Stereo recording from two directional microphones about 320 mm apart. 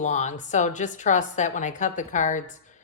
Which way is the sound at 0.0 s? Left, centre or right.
Left.